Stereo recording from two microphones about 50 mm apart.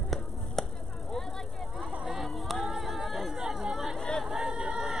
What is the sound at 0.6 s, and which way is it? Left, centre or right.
Chop, centre.